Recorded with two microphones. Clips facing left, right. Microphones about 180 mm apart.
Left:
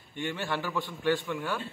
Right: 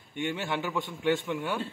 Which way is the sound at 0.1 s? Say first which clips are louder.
Right 1 dB; 20° right (ahead or behind).